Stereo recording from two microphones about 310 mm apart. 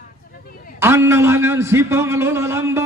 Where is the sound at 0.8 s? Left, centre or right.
Centre.